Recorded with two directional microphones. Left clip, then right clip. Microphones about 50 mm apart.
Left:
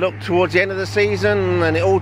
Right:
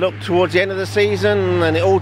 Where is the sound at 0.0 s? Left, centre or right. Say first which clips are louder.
Right 1 dB; centre.